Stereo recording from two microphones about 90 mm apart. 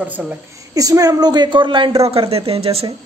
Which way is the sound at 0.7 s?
40° right (ahead or behind).